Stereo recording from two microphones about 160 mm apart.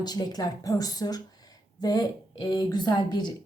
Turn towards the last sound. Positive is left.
turn(degrees=25)  # may be behind; listen again after turning